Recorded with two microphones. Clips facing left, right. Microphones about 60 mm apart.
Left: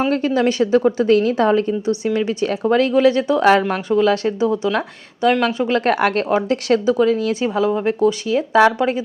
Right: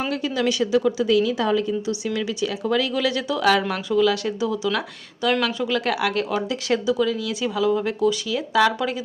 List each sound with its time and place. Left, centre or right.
0.1 s speech: left